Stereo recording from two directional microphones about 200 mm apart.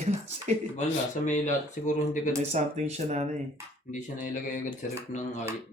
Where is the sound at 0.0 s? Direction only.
35° right (ahead or behind).